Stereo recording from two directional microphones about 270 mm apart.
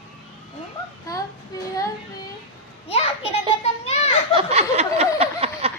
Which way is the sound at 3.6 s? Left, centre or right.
Left.